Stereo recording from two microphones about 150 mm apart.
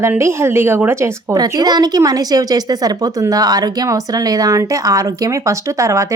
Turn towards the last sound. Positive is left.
turn(degrees=-20)  # may be behind; listen again after turning